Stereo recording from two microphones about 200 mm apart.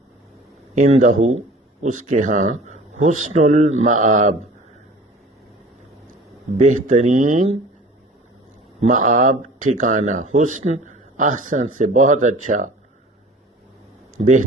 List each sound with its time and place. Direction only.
0.8 s speech: 35° right (ahead or behind)
6.6 s speech: 35° right (ahead or behind)
8.9 s speech: 40° right (ahead or behind)
14.2 s speech: 35° right (ahead or behind)